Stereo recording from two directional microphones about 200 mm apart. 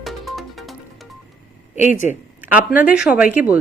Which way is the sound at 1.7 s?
40° left (ahead or behind).